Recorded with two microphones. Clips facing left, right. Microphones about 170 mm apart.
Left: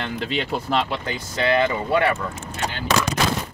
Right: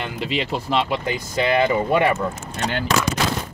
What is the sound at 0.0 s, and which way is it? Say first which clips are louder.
Speech: right 1 dB; 5° right (ahead or behind).